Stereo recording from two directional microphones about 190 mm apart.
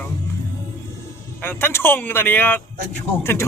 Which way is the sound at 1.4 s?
10° left (ahead or behind).